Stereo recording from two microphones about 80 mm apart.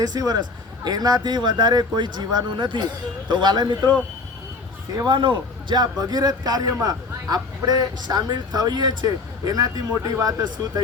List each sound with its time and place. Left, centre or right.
0.0 s speech: right
5.0 s speech: right